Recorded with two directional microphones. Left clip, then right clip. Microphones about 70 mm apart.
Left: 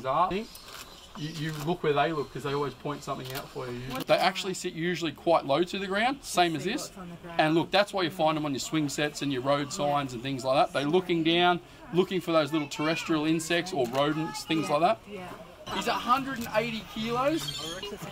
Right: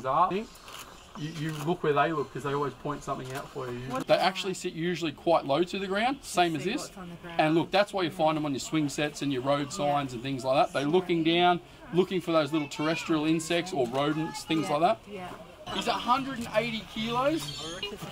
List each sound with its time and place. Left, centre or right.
0.0 s speech: centre
1.4 s speech: centre
17.6 s speech: left